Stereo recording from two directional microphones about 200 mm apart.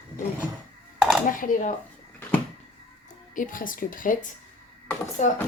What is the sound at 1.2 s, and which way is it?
Speech, 40° left (ahead or behind).